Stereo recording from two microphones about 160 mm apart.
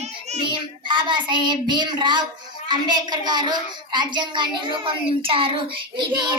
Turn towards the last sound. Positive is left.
turn(degrees=-30)  # may be behind; listen again after turning